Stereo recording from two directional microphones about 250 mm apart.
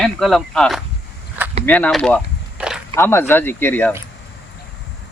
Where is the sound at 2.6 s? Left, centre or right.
Centre.